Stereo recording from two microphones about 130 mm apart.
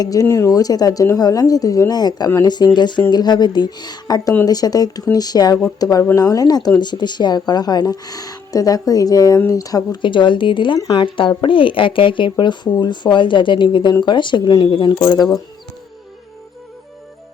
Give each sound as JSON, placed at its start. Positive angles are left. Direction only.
{"t": 0.0, "sound": "speech", "side_deg": 25}